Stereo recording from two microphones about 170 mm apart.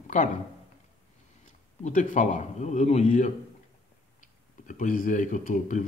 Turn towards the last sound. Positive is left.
turn(degrees=50)  # may be behind; listen again after turning